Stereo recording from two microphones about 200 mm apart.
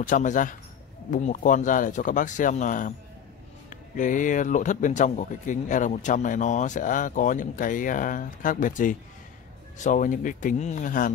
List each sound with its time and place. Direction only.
0.0 s speech: 40° left (ahead or behind)